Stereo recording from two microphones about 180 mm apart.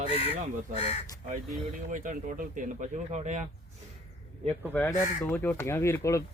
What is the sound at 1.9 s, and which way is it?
Speech, 45° right (ahead or behind).